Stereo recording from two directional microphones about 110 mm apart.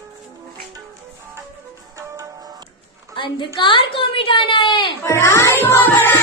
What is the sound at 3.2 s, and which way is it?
A woman's voice, 45° left (ahead or behind).